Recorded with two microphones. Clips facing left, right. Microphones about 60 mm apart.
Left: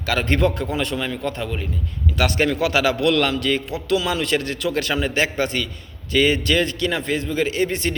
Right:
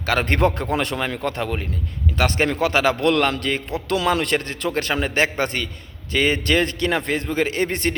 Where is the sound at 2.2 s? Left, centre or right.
Right.